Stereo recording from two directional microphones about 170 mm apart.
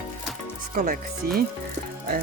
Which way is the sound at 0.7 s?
55° right (ahead or behind).